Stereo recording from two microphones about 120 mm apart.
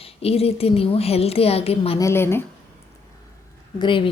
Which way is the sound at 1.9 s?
25° left (ahead or behind).